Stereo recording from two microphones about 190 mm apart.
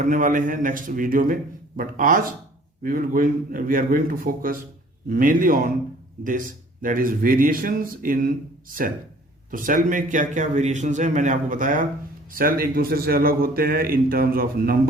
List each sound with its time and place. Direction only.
0.0 s a man's voice: 45° right (ahead or behind)
6.8 s a man's voice: 45° right (ahead or behind)